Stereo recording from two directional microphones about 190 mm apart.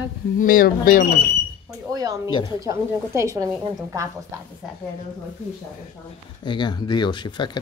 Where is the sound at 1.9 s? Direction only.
20° right (ahead or behind).